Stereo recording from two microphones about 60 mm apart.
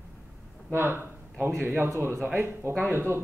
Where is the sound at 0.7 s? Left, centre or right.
Right.